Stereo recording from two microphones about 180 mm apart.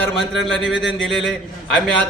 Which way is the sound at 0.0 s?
5° left (ahead or behind).